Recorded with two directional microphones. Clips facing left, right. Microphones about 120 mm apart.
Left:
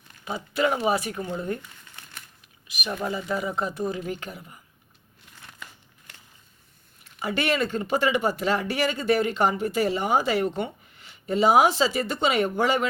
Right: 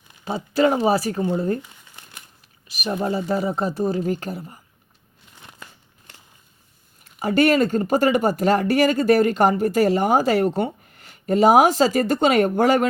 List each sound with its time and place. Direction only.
0.3 s speech: 30° right (ahead or behind)
2.6 s a sound: 40° right (ahead or behind)
3.0 s speech: 40° right (ahead or behind)
7.0 s speech: 40° right (ahead or behind)